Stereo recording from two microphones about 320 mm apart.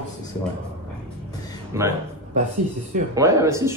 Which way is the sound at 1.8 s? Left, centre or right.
Centre.